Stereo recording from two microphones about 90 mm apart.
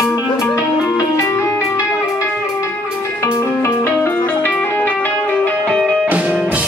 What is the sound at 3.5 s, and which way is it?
Music, 25° left (ahead or behind).